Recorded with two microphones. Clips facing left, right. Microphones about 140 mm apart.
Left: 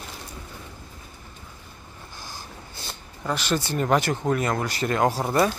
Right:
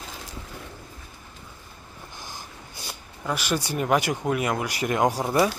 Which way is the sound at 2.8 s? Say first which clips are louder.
Even; 10° right (ahead or behind).